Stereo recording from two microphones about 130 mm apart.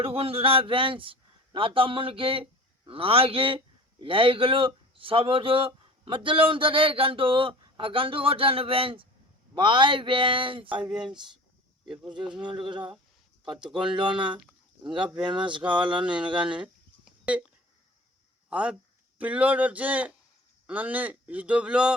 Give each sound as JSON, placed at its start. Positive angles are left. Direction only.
{"t": 0.0, "sound": "a man's voice", "side_deg": -45}
{"t": 11.9, "sound": "a man's voice", "side_deg": -35}
{"t": 16.4, "sound": "speech", "side_deg": -10}
{"t": 17.1, "sound": "a sound", "side_deg": -10}
{"t": 18.4, "sound": "speech", "side_deg": -5}